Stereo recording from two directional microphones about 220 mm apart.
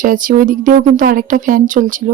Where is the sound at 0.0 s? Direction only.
40° right (ahead or behind).